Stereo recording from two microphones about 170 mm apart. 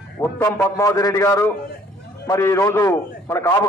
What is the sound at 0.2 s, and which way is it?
A man's voice, 15° left (ahead or behind).